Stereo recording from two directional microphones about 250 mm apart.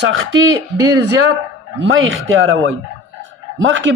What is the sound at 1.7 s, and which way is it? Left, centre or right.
A man's voice, right.